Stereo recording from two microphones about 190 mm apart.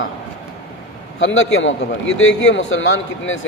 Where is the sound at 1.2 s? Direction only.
90° left.